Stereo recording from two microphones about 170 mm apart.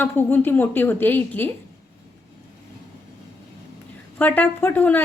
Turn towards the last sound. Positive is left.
turn(degrees=10)  # may be behind; listen again after turning